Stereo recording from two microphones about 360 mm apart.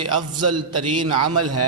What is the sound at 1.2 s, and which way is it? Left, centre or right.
Speech, right.